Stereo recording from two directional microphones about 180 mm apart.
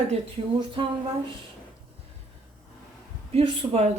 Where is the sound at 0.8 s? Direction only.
30° right (ahead or behind).